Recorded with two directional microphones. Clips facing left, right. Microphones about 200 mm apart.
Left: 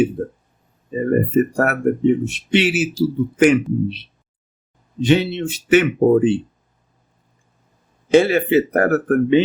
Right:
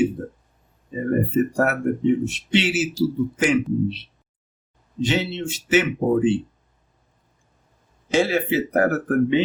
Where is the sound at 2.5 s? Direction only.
60° left (ahead or behind).